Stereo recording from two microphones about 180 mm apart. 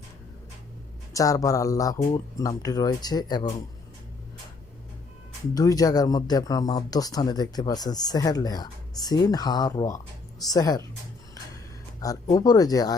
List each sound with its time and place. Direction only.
1.1 s speech: 20° left (ahead or behind)
5.5 s speech: 20° left (ahead or behind)
11.9 s speech: 20° left (ahead or behind)